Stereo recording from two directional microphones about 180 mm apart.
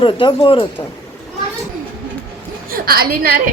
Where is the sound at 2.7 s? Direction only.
55° right (ahead or behind).